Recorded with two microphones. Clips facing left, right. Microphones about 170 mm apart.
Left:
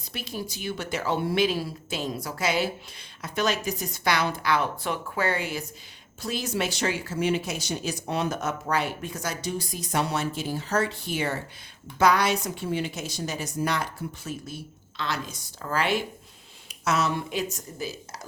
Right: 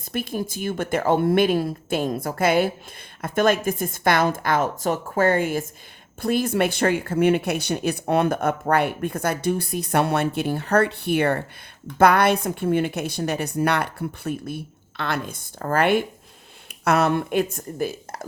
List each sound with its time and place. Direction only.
0.1 s a woman's voice: 50° right (ahead or behind)